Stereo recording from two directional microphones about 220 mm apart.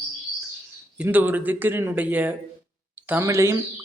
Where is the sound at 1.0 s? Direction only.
10° right (ahead or behind).